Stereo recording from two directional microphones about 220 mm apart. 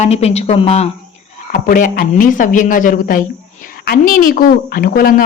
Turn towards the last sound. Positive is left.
turn(degrees=40)  # may be behind; listen again after turning